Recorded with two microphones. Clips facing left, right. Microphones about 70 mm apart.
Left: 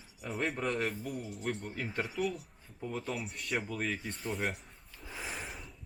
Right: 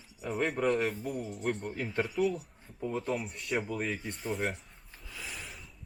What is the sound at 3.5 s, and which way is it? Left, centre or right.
Speech, centre.